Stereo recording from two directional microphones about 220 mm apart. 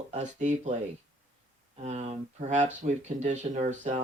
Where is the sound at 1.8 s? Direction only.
30° right (ahead or behind).